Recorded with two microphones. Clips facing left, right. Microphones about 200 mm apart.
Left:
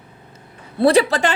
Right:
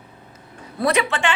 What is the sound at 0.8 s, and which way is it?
Speech, 35° left (ahead or behind).